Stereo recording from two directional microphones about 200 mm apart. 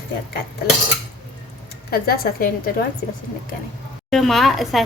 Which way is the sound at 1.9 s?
50° left (ahead or behind).